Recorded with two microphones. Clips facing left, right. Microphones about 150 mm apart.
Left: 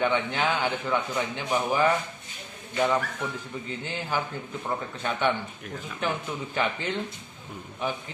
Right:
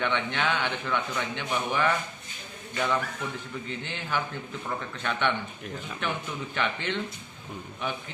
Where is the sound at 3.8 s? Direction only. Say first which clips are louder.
Left 3 dB; 40° left (ahead or behind).